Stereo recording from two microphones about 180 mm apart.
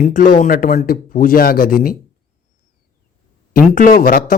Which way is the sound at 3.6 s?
50° left (ahead or behind).